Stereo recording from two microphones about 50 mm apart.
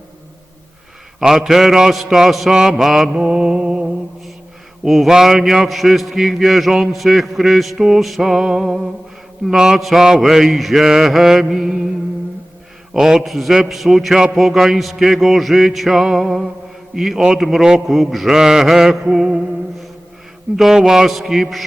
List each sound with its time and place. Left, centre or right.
1.2 s a man's voice: centre
3.1 s music: centre
4.9 s a man's voice: centre
12.9 s a man's voice: centre
18.3 s a man's voice: centre
20.6 s a man's voice: centre